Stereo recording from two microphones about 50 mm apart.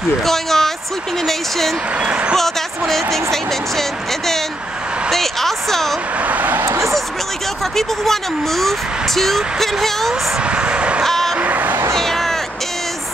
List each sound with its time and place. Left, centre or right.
0.2 s speech: centre
2.0 s speech: right
2.9 s speech: centre
5.1 s speech: centre
6.2 s speech: right
6.6 s speech: right
7.7 s speech: centre
10.4 s a sound: right
11.1 s vehicle: centre
11.3 s a sound: right
11.9 s cat: centre